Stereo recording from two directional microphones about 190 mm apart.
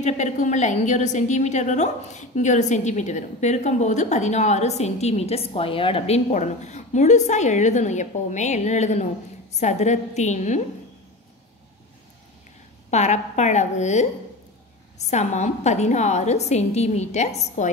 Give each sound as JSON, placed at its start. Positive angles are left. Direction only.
{"t": 0.0, "sound": "a woman's voice", "side_deg": 40}
{"t": 12.9, "sound": "a woman's voice", "side_deg": 35}